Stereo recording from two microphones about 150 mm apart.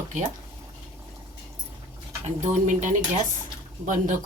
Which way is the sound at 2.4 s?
55° right (ahead or behind).